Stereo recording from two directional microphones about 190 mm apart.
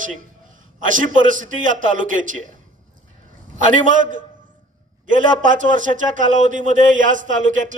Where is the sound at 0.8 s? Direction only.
45° right (ahead or behind).